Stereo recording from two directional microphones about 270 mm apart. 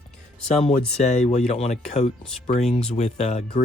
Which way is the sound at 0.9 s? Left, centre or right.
Left.